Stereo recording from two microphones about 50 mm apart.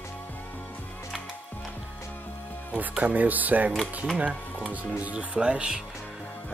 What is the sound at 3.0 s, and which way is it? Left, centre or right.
Speech, right.